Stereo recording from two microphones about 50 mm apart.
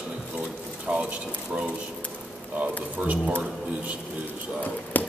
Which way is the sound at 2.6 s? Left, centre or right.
Right.